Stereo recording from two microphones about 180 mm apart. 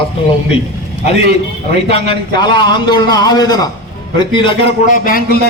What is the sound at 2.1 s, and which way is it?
A man's voice, 25° left (ahead or behind).